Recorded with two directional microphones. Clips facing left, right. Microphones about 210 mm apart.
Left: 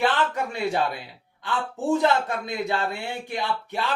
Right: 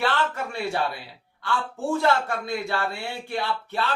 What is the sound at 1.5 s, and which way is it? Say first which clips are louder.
A man's voice: left 2 dB; 20° left (ahead or behind).